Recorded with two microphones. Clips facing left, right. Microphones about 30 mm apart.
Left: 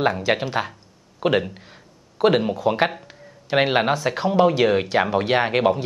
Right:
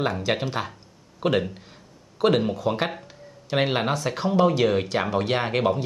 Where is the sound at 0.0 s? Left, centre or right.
Centre.